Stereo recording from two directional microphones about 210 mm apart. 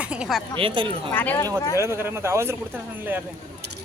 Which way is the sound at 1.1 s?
10° left (ahead or behind).